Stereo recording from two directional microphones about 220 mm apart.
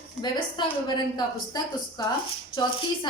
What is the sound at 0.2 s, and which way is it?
A woman's voice, 20° left (ahead or behind).